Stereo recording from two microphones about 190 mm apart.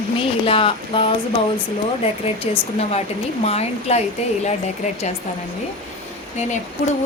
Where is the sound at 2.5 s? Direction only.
30° left (ahead or behind).